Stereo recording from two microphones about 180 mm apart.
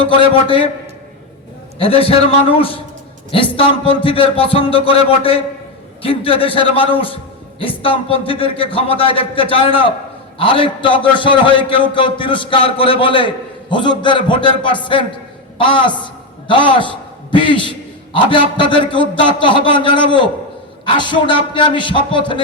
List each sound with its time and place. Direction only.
0.0 s a man's voice: 30° left (ahead or behind)
1.8 s a man's voice: 30° left (ahead or behind)